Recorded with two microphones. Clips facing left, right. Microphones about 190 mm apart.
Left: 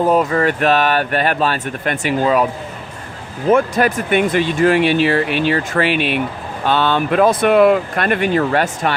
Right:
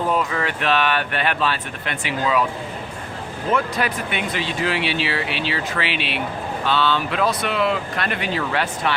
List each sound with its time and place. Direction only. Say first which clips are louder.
0.1 s speech: left 8 dB; 40° left (ahead or behind)
3.5 s speech: left 8 dB; 45° left (ahead or behind)